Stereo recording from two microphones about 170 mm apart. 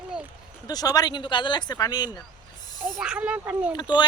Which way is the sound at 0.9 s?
25° left (ahead or behind).